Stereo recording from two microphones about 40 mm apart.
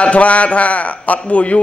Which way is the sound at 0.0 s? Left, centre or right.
Left.